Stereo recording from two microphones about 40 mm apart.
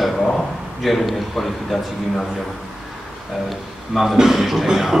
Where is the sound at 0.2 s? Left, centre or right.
Centre.